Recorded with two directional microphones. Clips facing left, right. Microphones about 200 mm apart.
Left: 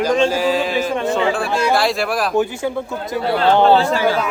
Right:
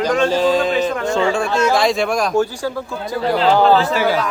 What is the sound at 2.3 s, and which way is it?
Speech, 20° left (ahead or behind).